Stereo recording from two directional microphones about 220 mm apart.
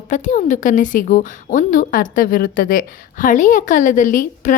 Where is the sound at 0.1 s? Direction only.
35° left (ahead or behind).